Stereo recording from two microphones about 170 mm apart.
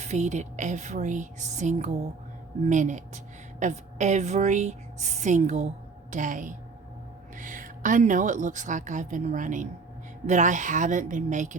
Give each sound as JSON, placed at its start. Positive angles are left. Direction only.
{"t": 0.0, "sound": "a woman's voice", "side_deg": -45}